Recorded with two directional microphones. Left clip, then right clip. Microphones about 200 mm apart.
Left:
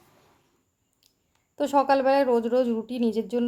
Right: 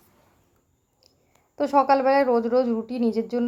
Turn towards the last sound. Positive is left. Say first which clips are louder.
# right 1 dB
turn(degrees=5)  # may be behind; listen again after turning